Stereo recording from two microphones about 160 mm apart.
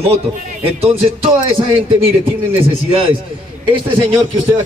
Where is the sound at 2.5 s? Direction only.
35° right (ahead or behind).